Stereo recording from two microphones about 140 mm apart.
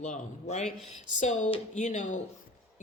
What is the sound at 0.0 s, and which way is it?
A woman's voice, 55° left (ahead or behind).